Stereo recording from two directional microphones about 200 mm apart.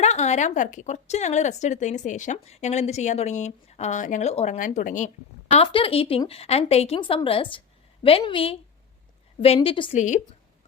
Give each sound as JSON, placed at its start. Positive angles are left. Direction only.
{"t": 0.0, "sound": "a woman's voice", "side_deg": 35}
{"t": 5.5, "sound": "speech", "side_deg": 25}